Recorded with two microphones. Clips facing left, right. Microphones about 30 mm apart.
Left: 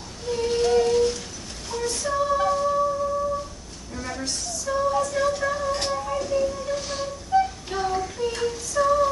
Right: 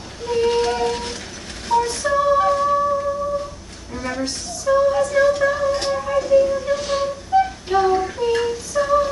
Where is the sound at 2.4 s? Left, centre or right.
Right.